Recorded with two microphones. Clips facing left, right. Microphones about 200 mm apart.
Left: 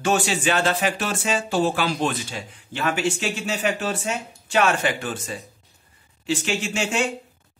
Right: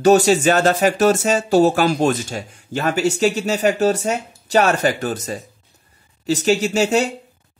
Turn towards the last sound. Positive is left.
turn(degrees=-40)  # may be behind; listen again after turning